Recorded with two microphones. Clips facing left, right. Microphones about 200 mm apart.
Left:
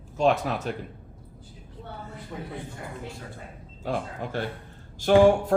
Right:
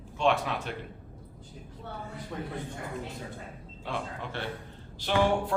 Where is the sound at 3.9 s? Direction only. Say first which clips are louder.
Left 5 dB; 45° left (ahead or behind).